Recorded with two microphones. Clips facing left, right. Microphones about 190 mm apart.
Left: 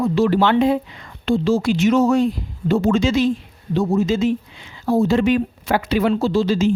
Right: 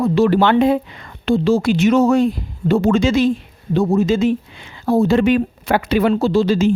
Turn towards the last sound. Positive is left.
turn(degrees=-60)  # may be behind; listen again after turning